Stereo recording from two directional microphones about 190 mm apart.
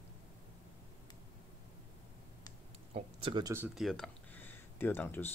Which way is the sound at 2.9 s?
25° right (ahead or behind).